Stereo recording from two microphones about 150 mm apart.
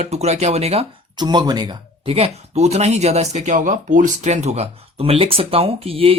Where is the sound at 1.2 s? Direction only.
30° right (ahead or behind).